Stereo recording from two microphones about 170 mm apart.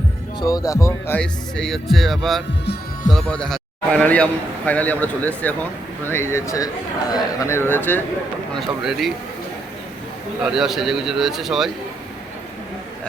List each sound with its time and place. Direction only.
0.3 s a man's voice: 20° left (ahead or behind)
8.5 s speech: centre (ahead or behind)
10.4 s speech: 5° right (ahead or behind)